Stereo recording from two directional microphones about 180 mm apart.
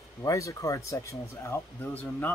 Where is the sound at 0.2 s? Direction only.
15° left (ahead or behind).